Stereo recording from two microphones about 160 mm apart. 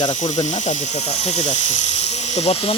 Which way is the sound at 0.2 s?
45° left (ahead or behind).